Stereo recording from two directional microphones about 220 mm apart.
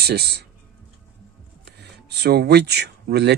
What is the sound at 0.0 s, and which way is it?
Speech, 45° right (ahead or behind).